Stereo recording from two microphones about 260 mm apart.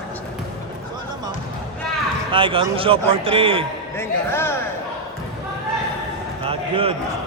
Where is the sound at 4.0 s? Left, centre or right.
Centre.